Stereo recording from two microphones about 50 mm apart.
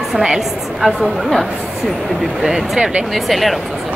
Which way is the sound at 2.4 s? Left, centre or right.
Centre.